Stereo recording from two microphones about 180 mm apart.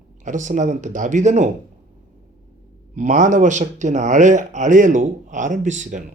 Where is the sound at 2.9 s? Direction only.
45° right (ahead or behind).